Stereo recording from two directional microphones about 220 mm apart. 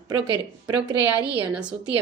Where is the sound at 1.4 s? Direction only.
5° right (ahead or behind).